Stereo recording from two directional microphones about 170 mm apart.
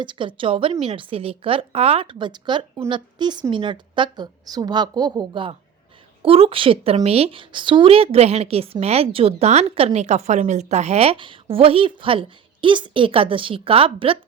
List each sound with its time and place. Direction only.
0.0 s a woman's voice: 30° right (ahead or behind)